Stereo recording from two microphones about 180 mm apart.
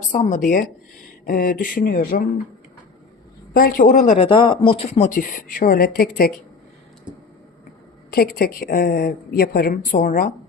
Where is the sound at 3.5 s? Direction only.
50° left (ahead or behind).